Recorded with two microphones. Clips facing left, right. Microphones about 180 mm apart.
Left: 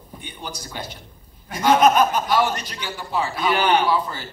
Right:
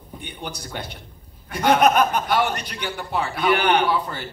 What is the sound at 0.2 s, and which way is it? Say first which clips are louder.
A man's voice: right 1 dB; 60° right (ahead or behind).